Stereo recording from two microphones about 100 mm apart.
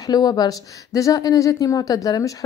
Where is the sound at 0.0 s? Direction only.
40° left (ahead or behind).